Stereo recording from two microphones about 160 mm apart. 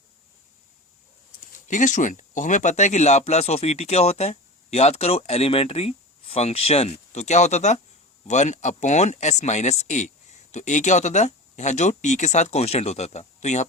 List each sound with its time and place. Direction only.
1.6 s speech: 50° left (ahead or behind)